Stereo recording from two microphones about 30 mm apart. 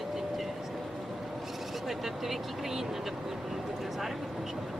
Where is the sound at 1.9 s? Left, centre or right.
Centre.